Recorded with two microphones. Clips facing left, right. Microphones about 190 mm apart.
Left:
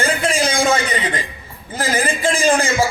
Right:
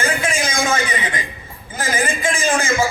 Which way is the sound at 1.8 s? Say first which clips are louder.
Left 2 dB; 35° left (ahead or behind).